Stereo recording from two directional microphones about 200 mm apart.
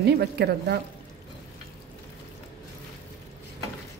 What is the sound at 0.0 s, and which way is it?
Speech, 55° right (ahead or behind).